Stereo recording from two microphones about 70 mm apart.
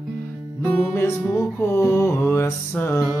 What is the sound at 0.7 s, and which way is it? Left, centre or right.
Music, left.